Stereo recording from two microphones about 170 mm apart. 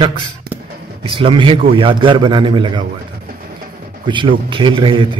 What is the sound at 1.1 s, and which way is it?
A man's voice, 30° right (ahead or behind).